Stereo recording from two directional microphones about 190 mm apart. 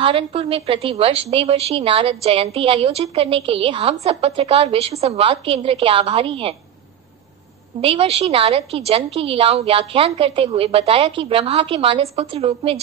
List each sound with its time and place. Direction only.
0.0 s a woman's voice: 30° right (ahead or behind)
7.8 s a woman's voice: 30° right (ahead or behind)